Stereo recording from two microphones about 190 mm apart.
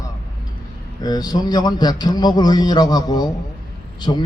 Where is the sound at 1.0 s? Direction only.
20° left (ahead or behind).